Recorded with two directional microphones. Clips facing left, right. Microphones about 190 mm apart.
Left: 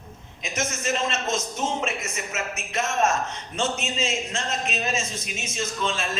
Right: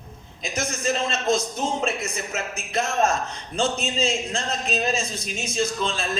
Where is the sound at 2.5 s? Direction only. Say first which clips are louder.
Right 3 dB; 35° right (ahead or behind).